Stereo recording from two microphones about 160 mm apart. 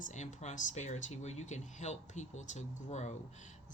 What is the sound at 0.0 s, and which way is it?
Speech, 50° left (ahead or behind).